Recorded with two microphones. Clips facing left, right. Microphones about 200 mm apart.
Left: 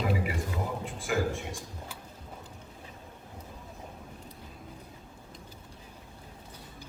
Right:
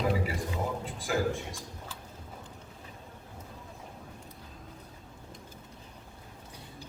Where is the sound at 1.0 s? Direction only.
35° right (ahead or behind).